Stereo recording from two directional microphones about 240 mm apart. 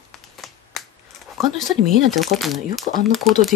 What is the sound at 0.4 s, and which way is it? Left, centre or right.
Finger snapping, centre.